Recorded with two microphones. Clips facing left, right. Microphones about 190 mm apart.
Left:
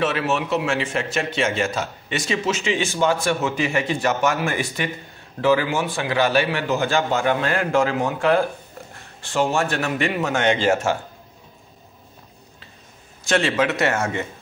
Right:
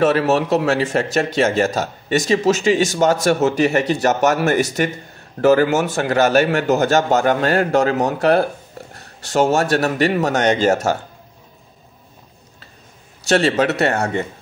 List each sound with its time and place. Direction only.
0.0 s a man's voice: 40° right (ahead or behind)
13.3 s speech: 35° right (ahead or behind)